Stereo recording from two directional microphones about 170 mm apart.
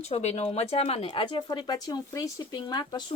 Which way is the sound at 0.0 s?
40° left (ahead or behind).